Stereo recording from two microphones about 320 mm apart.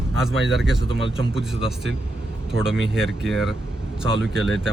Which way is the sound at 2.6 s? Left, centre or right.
Centre.